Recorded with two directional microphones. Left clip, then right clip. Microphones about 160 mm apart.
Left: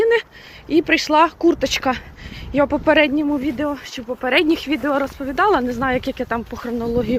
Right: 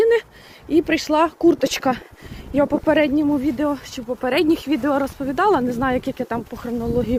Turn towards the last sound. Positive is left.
turn(degrees=-15)  # may be behind; listen again after turning